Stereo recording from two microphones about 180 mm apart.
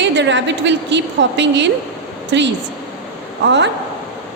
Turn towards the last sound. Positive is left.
turn(degrees=-80)